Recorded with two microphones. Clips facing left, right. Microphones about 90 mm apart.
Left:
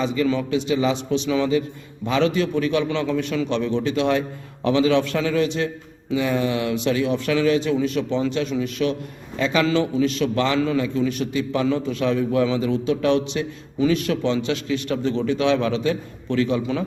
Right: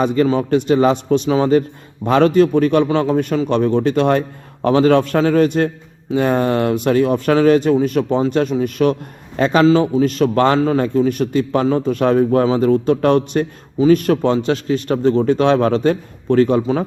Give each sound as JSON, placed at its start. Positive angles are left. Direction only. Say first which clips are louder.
{"t": 0.0, "sound": "a man's voice", "louder": "right 6 dB", "side_deg": -50}
{"t": 9.6, "sound": "a man's voice", "louder": "right 7 dB", "side_deg": -30}